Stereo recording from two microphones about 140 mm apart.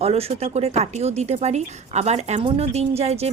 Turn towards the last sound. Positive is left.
turn(degrees=-50)  # may be behind; listen again after turning